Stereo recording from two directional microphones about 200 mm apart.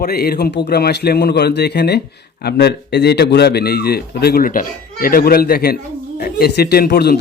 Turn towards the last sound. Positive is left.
turn(degrees=55)  # may be behind; listen again after turning